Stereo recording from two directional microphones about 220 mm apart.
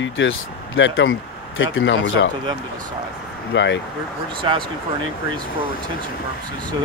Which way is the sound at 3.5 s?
55° left (ahead or behind).